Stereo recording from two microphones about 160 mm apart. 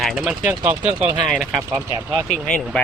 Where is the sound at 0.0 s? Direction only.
Centre (ahead or behind).